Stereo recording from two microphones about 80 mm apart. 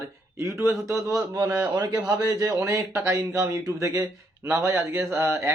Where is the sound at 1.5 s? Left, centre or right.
Right.